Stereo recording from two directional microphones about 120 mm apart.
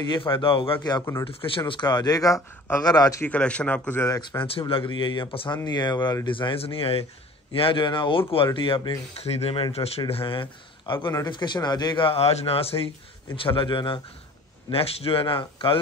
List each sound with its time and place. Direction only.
0.1 s speech: 45° left (ahead or behind)
3.2 s speech: 10° left (ahead or behind)
4.6 s speech: 45° left (ahead or behind)
9.2 s speech: 60° left (ahead or behind); by 14.0 s 40° left (ahead or behind)
14.7 s speech: 55° left (ahead or behind)